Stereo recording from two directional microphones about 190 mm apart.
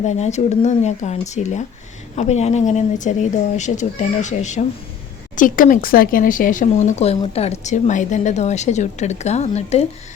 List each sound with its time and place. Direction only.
0.0 s speech: 35° left (ahead or behind)